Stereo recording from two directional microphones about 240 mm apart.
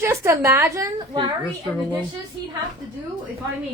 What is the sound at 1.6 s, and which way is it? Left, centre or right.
Speech, centre.